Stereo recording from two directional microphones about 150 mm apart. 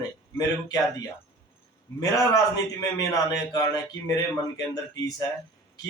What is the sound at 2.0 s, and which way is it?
Speech, 25° left (ahead or behind).